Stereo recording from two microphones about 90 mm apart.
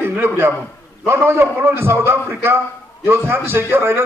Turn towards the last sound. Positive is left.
turn(degrees=-25)  # may be behind; listen again after turning